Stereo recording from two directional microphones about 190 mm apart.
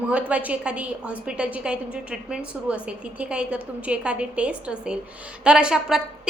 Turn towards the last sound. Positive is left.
turn(degrees=-5)  # may be behind; listen again after turning